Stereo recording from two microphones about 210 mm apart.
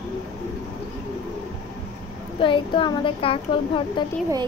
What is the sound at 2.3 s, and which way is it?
Speech, 25° left (ahead or behind).